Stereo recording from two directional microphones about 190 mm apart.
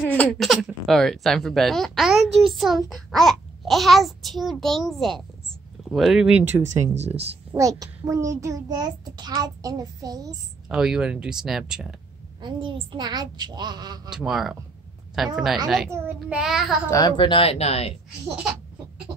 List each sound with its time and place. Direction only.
0.1 s a child's voice: 5° left (ahead or behind)
6.9 s speech: 35° right (ahead or behind)
7.5 s a child's voice: 20° right (ahead or behind)
10.7 s a child's voice: 5° right (ahead or behind)
12.4 s a child's voice: 25° right (ahead or behind)
14.1 s a child's voice: centre (ahead or behind)
16.9 s speech: 25° left (ahead or behind)